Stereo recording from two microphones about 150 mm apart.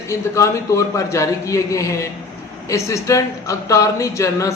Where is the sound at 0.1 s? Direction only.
20° left (ahead or behind).